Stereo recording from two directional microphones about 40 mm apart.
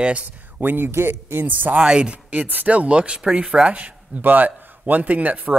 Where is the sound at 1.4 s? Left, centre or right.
Right.